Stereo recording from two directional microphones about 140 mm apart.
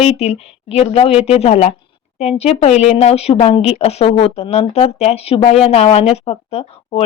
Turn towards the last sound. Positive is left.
turn(degrees=45)  # may be behind; listen again after turning